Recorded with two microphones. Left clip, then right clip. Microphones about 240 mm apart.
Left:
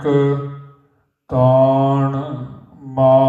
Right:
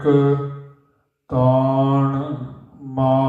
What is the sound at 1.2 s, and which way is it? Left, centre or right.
Mantra, left.